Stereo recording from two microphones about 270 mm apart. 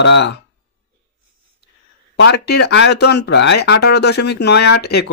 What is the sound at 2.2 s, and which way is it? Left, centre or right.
Speech, left.